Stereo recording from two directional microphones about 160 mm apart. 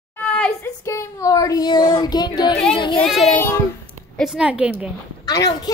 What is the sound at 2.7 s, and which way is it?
Child singing, 30° left (ahead or behind).